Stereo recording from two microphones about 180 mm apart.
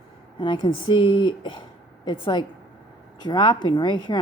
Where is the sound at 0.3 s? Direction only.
25° left (ahead or behind).